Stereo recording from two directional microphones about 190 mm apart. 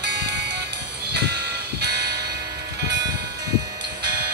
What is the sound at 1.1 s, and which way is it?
Music, 60° right (ahead or behind).